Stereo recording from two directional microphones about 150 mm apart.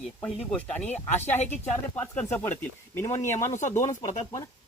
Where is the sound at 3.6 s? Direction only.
55° left (ahead or behind).